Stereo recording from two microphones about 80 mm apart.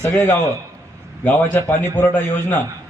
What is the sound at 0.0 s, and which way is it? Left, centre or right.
Speech, left.